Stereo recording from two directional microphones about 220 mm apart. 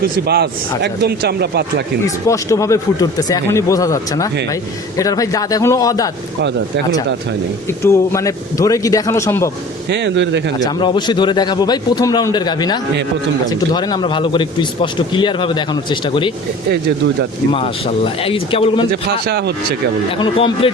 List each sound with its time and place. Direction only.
0.0 s a man's voice: 45° right (ahead or behind)
2.0 s speech: 15° left (ahead or behind)
7.7 s speech: 10° left (ahead or behind)
9.9 s a man's voice: 50° right (ahead or behind)
10.6 s a man's voice: 20° left (ahead or behind)
17.5 s a man's voice: 25° left (ahead or behind)
18.9 s a man's voice: 45° right (ahead or behind)
20.4 s a man's voice: 25° left (ahead or behind)